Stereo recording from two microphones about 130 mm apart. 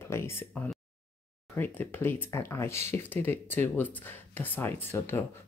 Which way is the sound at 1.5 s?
15° left (ahead or behind).